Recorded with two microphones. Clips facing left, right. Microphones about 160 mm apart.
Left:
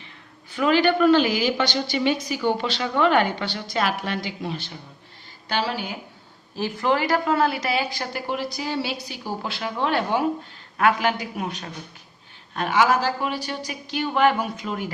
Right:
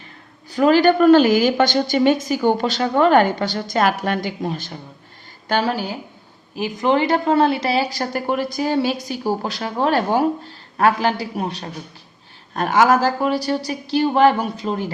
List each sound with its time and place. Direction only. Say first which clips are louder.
0.5 s a woman's voice: right 5 dB; 40° right (ahead or behind)
6.6 s a woman's voice: right 4 dB; 20° right (ahead or behind)